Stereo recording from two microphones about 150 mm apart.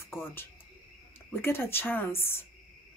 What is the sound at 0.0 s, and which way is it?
Owl, 15° left (ahead or behind).